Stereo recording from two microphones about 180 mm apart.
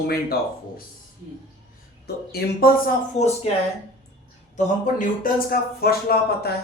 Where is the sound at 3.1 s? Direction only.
35° left (ahead or behind).